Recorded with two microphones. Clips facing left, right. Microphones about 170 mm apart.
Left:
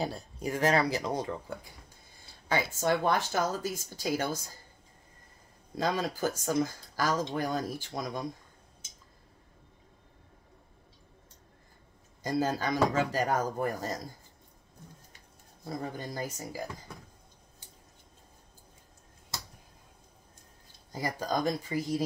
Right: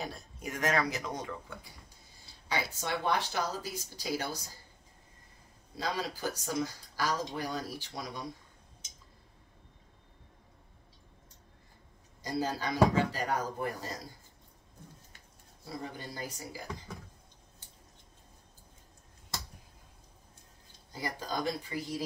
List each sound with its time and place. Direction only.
0.0 s speech: 35° left (ahead or behind)
2.4 s speech: 45° left (ahead or behind)
5.8 s speech: 50° left (ahead or behind)
12.2 s speech: 50° left (ahead or behind)
15.6 s speech: 45° left (ahead or behind)
20.9 s speech: 45° left (ahead or behind)